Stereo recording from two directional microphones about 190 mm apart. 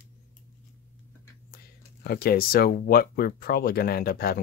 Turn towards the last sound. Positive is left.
turn(degrees=50)  # may be behind; listen again after turning